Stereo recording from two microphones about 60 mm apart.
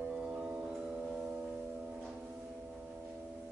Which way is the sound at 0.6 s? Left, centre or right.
Centre.